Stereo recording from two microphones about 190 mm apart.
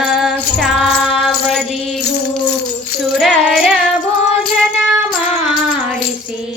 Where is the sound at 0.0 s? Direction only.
5° right (ahead or behind).